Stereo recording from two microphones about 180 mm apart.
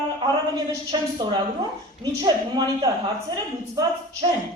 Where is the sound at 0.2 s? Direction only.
25° right (ahead or behind).